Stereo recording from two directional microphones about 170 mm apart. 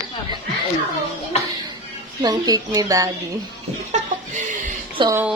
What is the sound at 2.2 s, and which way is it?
Speech, 25° right (ahead or behind).